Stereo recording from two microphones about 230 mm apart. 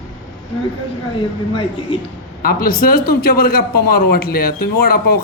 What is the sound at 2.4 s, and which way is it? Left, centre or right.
A man's voice, left.